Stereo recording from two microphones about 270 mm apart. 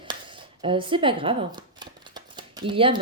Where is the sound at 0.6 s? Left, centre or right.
Centre.